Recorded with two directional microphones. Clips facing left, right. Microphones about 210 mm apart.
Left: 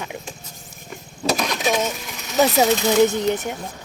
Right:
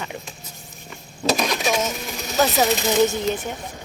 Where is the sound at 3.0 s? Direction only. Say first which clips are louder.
Left 2 dB; 15° left (ahead or behind).